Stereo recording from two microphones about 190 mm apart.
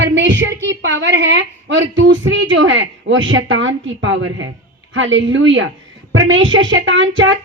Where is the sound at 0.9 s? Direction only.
70° right (ahead or behind).